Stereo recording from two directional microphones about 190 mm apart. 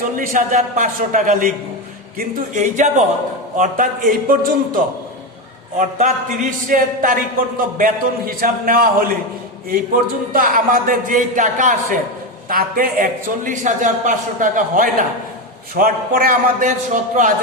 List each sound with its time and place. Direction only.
0.2 s a man's voice: 40° right (ahead or behind)
10.3 s a man's voice: 50° right (ahead or behind)